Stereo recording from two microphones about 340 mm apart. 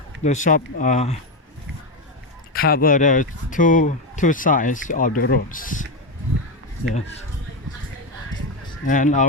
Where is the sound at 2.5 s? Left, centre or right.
Left.